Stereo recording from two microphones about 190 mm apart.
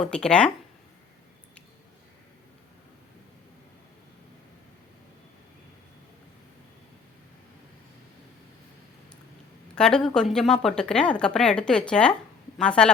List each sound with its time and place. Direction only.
0.0 s a woman's voice: 5° left (ahead or behind)
9.7 s a woman's voice: 5° left (ahead or behind)